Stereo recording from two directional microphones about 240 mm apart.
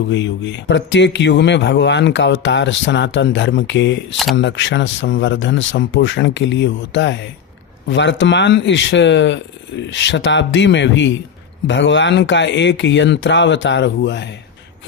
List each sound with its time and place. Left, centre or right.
0.1 s a man's voice: left